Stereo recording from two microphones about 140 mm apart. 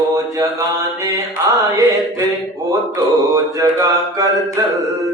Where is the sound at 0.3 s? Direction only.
25° right (ahead or behind).